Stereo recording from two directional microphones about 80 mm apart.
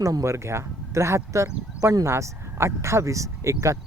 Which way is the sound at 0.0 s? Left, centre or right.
Right.